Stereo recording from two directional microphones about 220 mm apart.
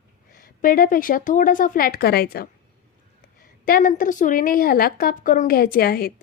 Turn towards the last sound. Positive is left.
turn(degrees=45)  # may be behind; listen again after turning